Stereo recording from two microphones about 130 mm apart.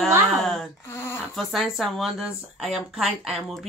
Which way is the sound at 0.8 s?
20° left (ahead or behind).